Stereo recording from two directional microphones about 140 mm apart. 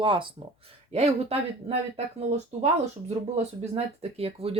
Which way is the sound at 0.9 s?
50° right (ahead or behind).